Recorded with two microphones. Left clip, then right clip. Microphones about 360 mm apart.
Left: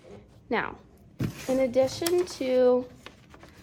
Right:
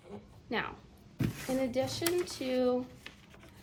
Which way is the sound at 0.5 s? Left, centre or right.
Left.